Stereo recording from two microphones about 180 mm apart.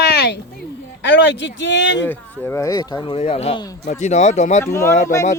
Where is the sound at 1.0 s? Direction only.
90° left.